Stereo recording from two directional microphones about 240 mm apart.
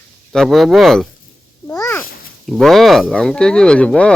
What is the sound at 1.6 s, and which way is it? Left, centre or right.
Babbling, centre.